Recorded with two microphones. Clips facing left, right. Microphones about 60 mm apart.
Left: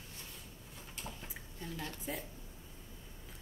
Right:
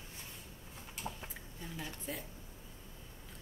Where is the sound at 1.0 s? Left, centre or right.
Centre.